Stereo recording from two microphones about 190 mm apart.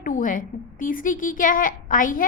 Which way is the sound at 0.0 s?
45° left (ahead or behind).